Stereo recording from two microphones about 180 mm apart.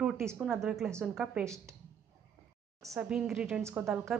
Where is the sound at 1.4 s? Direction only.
15° right (ahead or behind).